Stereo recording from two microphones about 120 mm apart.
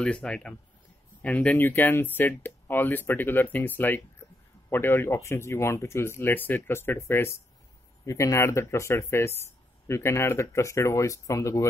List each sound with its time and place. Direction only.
0.0 s speech: 10° left (ahead or behind); by 11.6 s 25° left (ahead or behind)